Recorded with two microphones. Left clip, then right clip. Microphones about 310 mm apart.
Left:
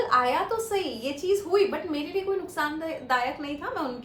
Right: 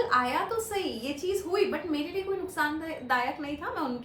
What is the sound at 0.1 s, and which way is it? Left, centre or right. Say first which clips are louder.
A woman's voice: left 3 dB; centre.